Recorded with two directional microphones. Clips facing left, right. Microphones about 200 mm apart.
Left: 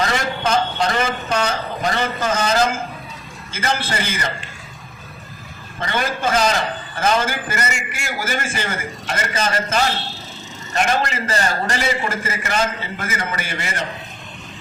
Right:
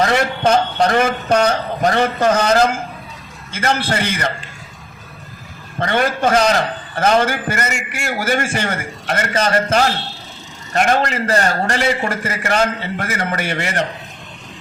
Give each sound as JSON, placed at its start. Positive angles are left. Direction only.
{"t": 0.1, "sound": "a man's voice", "side_deg": -60}
{"t": 5.8, "sound": "a man's voice", "side_deg": -60}